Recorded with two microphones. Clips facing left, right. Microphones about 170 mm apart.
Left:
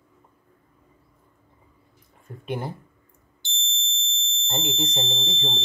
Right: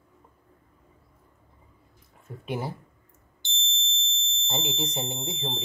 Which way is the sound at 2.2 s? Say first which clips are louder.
Left 1 dB; centre (ahead or behind).